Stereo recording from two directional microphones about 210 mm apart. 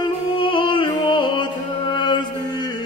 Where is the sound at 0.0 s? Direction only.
25° left (ahead or behind).